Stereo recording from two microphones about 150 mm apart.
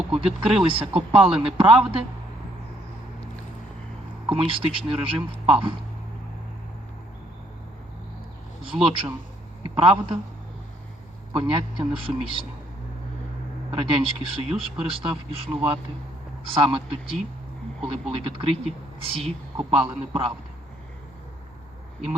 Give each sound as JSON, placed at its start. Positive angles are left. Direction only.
{"t": 0.1, "sound": "a man's voice", "side_deg": -40}
{"t": 4.3, "sound": "a man's voice", "side_deg": -35}
{"t": 8.7, "sound": "a man's voice", "side_deg": -35}
{"t": 11.3, "sound": "a man's voice", "side_deg": -35}
{"t": 13.7, "sound": "a man's voice", "side_deg": -35}